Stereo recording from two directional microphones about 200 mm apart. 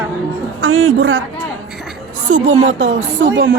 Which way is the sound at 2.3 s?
40° right (ahead or behind).